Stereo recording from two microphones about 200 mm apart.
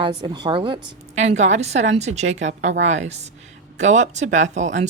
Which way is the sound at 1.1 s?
35° right (ahead or behind).